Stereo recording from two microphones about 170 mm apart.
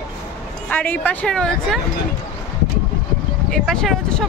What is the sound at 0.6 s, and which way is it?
Speech, 10° left (ahead or behind).